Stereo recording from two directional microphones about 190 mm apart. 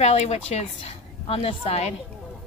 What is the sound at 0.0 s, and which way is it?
Speech, 35° left (ahead or behind).